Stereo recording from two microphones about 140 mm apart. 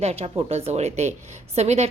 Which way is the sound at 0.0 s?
45° right (ahead or behind).